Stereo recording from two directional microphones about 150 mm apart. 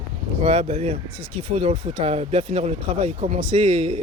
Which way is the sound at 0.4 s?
40° right (ahead or behind).